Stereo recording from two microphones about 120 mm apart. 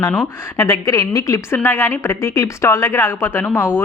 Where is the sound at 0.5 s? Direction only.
25° left (ahead or behind).